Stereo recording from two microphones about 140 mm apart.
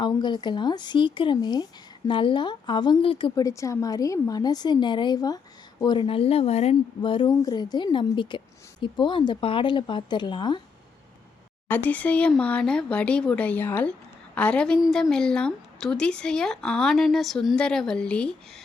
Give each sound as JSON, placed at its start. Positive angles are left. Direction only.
{"t": 0.0, "sound": "a woman's voice", "side_deg": 30}
{"t": 3.3, "sound": "a woman's voice", "side_deg": 25}
{"t": 11.7, "sound": "a woman's voice", "side_deg": 10}